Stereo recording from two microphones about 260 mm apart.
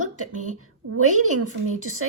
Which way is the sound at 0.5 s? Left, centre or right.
Right.